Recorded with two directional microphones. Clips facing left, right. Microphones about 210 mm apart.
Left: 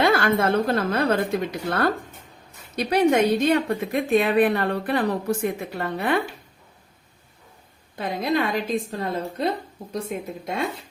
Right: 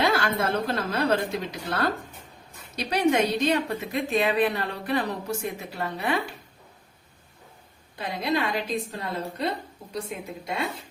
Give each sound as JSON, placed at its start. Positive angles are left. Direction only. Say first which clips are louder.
{"t": 0.0, "sound": "speech", "louder": "left 5 dB", "side_deg": 55}
{"t": 7.9, "sound": "a woman's voice", "louder": "left 3 dB", "side_deg": 50}
{"t": 9.9, "sound": "a woman's voice", "louder": "left 4 dB", "side_deg": 45}